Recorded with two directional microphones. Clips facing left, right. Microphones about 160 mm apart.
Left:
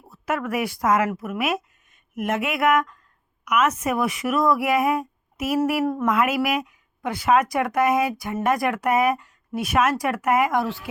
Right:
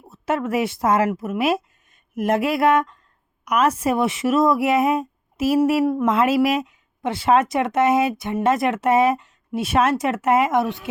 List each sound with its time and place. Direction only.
0.1 s speech: 25° right (ahead or behind)
2.1 s a sound: 35° right (ahead or behind)
3.4 s speech: 35° right (ahead or behind)
5.8 s speech: 10° right (ahead or behind)
6.1 s speech: 30° right (ahead or behind)